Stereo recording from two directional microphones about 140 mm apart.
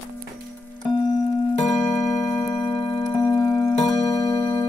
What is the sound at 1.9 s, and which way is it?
Clock, 15° left (ahead or behind).